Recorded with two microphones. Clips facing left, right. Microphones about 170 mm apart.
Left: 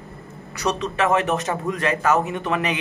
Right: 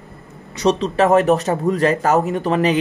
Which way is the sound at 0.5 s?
30° right (ahead or behind).